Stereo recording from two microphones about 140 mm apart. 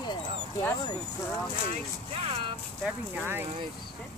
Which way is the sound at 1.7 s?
45° right (ahead or behind).